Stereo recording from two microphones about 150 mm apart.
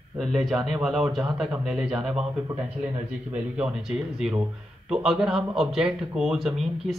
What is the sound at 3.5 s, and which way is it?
Speech, 5° right (ahead or behind).